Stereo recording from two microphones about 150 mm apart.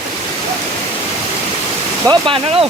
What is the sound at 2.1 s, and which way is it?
Speech, 35° right (ahead or behind).